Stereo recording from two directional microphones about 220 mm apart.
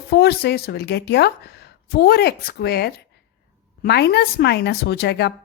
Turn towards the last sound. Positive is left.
turn(degrees=50)  # may be behind; listen again after turning